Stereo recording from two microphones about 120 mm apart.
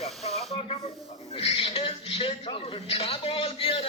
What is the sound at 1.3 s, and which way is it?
A man's voice, 55° left (ahead or behind).